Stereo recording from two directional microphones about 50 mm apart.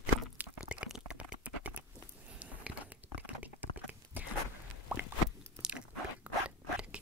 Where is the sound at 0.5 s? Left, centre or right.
Centre.